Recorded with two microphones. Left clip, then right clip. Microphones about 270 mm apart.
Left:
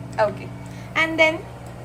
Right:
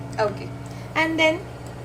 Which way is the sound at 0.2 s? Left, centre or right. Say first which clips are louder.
Left 3 dB; centre.